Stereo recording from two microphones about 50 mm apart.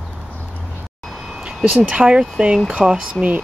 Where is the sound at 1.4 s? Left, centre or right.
Centre.